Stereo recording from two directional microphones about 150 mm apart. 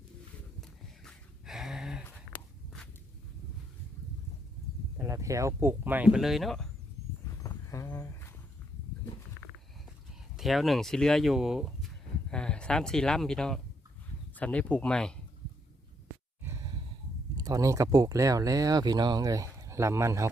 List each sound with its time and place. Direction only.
0.6 s a sound: centre (ahead or behind)
2.0 s a sound: 10° left (ahead or behind)
4.9 s speech: 20° right (ahead or behind); by 6.7 s centre (ahead or behind)
7.3 s wild animals: 20° left (ahead or behind)
10.3 s speech: centre (ahead or behind)
16.4 s sigh: 20° right (ahead or behind)
17.3 s speech: 25° right (ahead or behind)